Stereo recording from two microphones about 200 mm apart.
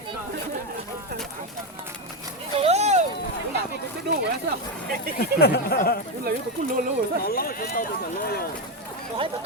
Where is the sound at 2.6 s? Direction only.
35° right (ahead or behind).